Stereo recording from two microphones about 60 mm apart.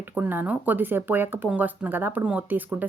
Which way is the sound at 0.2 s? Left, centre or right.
Right.